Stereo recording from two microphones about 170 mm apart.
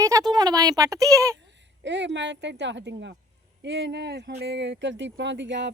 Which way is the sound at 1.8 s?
90° right.